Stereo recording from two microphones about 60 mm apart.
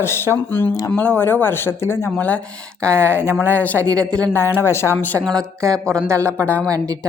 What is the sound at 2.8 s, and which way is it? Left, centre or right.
Speech, centre.